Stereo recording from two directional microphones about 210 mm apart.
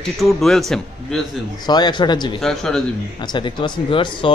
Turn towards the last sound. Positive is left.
turn(degrees=25)  # may be behind; listen again after turning